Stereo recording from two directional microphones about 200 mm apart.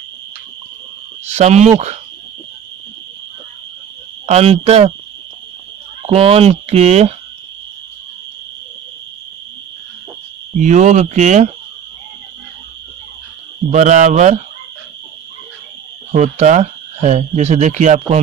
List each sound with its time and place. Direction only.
1.3 s speech: 35° right (ahead or behind)
4.3 s speech: 30° right (ahead or behind)
6.0 s speech: 30° right (ahead or behind)
10.6 s speech: 35° right (ahead or behind)
13.7 s speech: 35° right (ahead or behind)
16.1 s speech: 35° right (ahead or behind)